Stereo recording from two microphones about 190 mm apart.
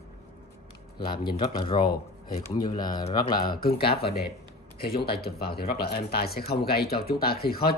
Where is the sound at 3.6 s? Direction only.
55° left (ahead or behind).